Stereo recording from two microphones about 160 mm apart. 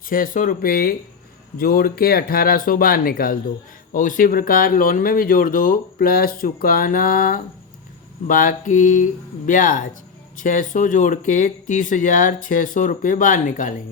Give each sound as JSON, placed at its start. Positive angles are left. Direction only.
{"t": 0.1, "sound": "speech", "side_deg": 55}
{"t": 8.3, "sound": "mantra", "side_deg": 60}
{"t": 9.5, "sound": "speech", "side_deg": 55}